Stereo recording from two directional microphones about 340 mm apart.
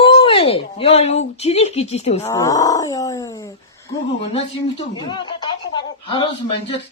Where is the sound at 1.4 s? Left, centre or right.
Centre.